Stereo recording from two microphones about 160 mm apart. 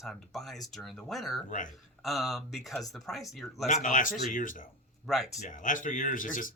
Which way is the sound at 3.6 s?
50° left (ahead or behind).